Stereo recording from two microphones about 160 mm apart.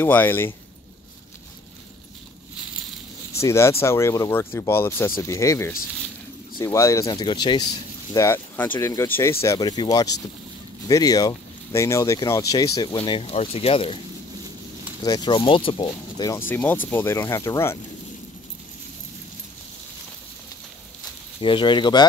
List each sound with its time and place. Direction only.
0.0 s speech: 10° left (ahead or behind)
3.3 s speech: 15° left (ahead or behind)
8.1 s speech: 15° left (ahead or behind)
12.9 s speech: 30° left (ahead or behind)
15.0 s speech: 25° left (ahead or behind)
21.4 s speech: 30° left (ahead or behind)